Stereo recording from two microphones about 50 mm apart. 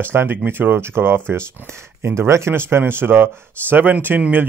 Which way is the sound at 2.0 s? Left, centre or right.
Right.